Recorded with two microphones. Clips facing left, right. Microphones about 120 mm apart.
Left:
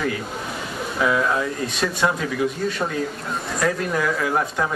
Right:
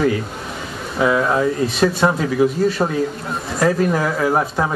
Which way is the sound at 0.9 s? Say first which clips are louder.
Right 4 dB; 25° right (ahead or behind).